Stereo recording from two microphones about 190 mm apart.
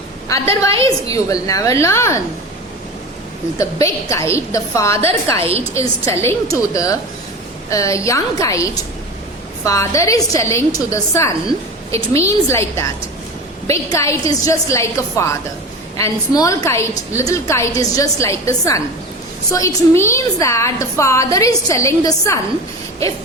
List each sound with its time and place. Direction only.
0.9 s a woman's voice: 20° left (ahead or behind)
3.6 s a woman's voice: 15° left (ahead or behind)
5.4 s a woman's voice: 30° right (ahead or behind)
5.7 s a woman's voice: 15° left (ahead or behind)